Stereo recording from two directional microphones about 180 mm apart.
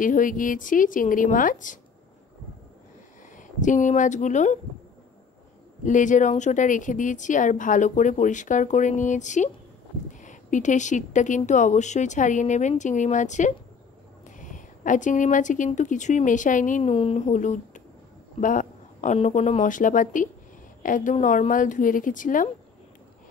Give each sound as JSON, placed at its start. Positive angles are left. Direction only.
{"t": 0.0, "sound": "speech", "side_deg": 50}
{"t": 3.3, "sound": "speech", "side_deg": 45}
{"t": 5.9, "sound": "speech", "side_deg": 45}
{"t": 16.9, "sound": "speech", "side_deg": 35}